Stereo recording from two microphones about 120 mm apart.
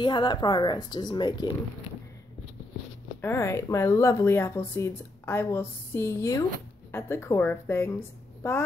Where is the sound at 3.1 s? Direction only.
20° left (ahead or behind).